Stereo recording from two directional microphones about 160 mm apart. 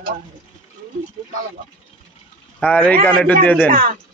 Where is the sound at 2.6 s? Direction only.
5° left (ahead or behind).